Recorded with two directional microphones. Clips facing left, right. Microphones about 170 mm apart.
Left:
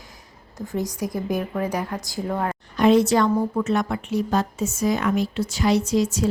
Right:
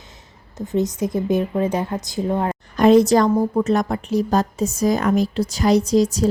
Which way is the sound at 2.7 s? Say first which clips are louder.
Right 4 dB; 40° right (ahead or behind).